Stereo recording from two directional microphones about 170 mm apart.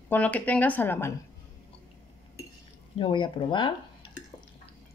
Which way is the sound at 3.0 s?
30° left (ahead or behind).